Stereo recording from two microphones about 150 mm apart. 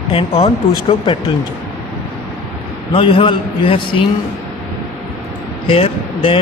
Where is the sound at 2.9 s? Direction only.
35° left (ahead or behind).